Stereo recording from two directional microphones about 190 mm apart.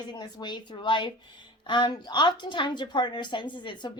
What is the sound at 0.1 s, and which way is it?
A woman's voice, 20° left (ahead or behind).